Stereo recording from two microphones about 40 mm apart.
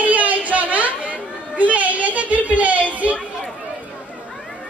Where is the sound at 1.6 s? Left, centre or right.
Right.